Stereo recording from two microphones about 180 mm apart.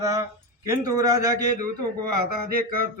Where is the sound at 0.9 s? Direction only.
15° right (ahead or behind).